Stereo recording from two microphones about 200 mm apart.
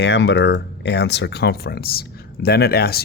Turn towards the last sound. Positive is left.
turn(degrees=50)  # may be behind; listen again after turning